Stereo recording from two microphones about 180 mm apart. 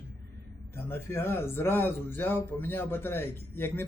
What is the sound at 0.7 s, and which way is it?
Speech, 15° left (ahead or behind).